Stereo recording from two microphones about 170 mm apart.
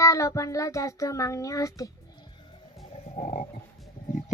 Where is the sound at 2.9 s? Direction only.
40° left (ahead or behind).